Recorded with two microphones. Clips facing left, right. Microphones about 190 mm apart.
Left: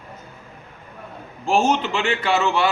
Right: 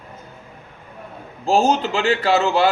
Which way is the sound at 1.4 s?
35° right (ahead or behind).